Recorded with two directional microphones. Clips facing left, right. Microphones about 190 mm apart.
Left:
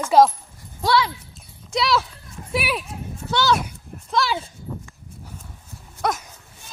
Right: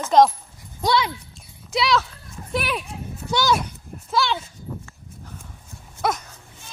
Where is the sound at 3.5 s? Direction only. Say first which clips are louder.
Even; centre (ahead or behind).